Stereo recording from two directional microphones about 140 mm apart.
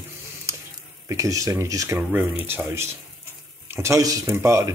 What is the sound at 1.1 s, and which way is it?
Speech, 25° right (ahead or behind).